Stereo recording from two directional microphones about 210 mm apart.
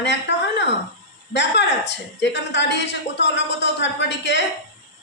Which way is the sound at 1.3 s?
55° left (ahead or behind).